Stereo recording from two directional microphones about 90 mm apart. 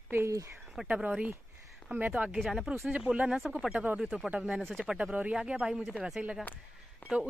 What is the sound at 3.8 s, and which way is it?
Speech, 15° right (ahead or behind).